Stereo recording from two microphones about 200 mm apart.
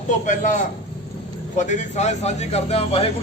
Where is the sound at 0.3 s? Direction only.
40° left (ahead or behind).